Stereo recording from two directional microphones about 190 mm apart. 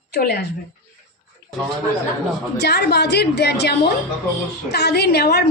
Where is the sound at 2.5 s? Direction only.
60° left (ahead or behind).